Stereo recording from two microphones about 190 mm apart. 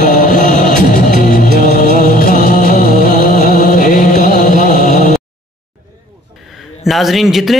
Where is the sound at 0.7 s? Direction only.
50° left (ahead or behind).